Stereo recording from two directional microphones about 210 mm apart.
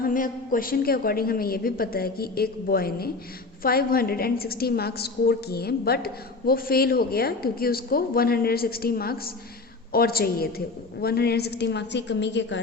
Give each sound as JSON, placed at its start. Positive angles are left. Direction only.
{"t": 0.0, "sound": "a woman's voice", "side_deg": 40}